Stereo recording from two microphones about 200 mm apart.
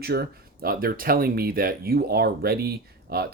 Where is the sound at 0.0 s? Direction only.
50° right (ahead or behind).